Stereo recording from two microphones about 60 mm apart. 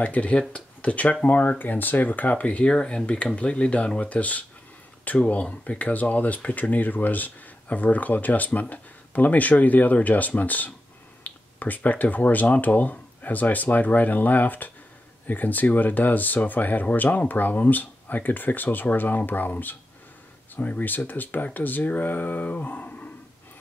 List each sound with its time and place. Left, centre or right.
0.0 s speech: left